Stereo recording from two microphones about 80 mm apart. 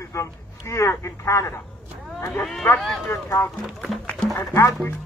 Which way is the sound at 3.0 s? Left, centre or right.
Left.